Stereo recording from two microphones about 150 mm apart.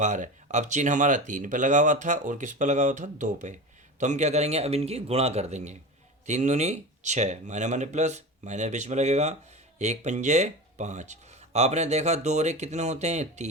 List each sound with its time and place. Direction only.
0.0 s speech: 55° right (ahead or behind)